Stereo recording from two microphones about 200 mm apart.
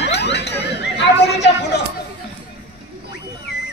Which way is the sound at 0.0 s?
60° left (ahead or behind).